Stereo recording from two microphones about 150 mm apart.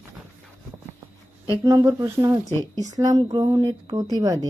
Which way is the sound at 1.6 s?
20° right (ahead or behind).